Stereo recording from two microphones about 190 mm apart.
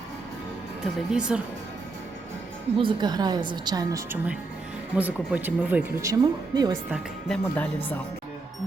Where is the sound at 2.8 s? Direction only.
25° right (ahead or behind).